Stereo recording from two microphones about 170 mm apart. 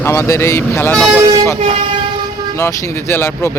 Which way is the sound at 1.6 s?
35° right (ahead or behind).